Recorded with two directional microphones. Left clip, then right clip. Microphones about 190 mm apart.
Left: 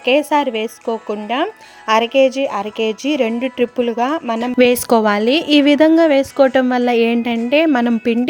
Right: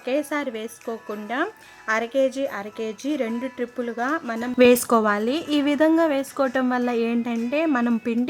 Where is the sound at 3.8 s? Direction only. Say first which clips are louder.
Left 5 dB; 20° left (ahead or behind).